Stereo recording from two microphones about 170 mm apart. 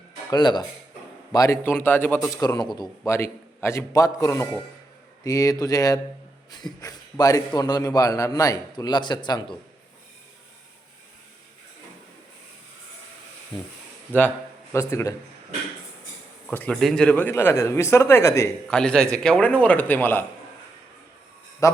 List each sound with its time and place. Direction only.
0.3 s a man's voice: 25° left (ahead or behind)
2.3 s a man's voice: 20° left (ahead or behind)
13.5 s a man's voice: 30° left (ahead or behind)
14.7 s speech: 15° left (ahead or behind)
16.5 s speech: 10° left (ahead or behind)
18.7 s speech: 5° left (ahead or behind)
21.6 s speech: 20° left (ahead or behind)